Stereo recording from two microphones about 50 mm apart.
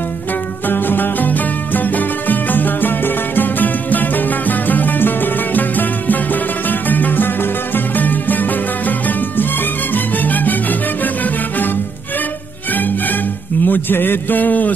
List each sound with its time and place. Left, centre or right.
0.7 s music: left
12.7 s music: left
13.7 s a man's voice: left